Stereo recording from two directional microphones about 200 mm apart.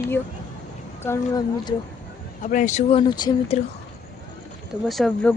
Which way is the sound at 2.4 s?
40° left (ahead or behind).